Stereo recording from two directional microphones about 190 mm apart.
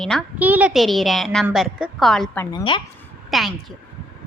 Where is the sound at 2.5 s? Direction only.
25° left (ahead or behind).